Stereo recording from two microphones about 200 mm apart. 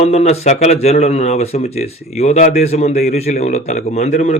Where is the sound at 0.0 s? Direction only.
35° left (ahead or behind).